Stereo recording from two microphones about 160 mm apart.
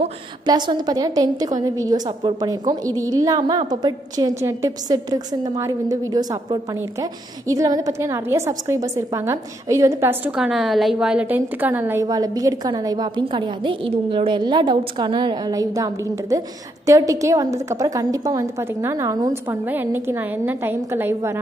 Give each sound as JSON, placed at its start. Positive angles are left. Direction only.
{"t": 0.5, "sound": "a woman's voice", "side_deg": -25}